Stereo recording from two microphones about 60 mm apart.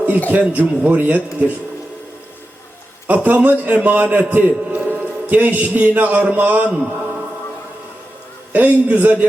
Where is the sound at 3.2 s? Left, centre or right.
Right.